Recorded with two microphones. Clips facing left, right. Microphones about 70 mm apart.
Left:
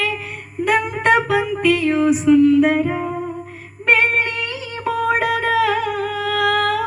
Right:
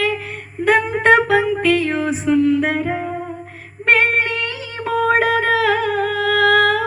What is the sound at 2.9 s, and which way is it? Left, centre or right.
Humming, right.